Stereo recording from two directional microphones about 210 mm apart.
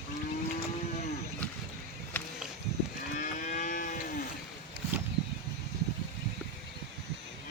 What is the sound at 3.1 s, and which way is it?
Cattle, 35° left (ahead or behind).